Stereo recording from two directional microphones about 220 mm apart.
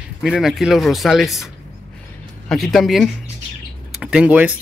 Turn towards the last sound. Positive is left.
turn(degrees=-5)  # may be behind; listen again after turning